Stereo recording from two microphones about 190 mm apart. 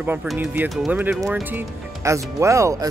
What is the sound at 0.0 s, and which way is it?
Speech, 10° right (ahead or behind).